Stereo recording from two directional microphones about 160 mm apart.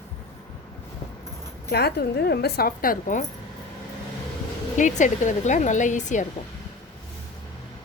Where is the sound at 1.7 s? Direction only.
80° left; by 3.2 s 60° left (ahead or behind).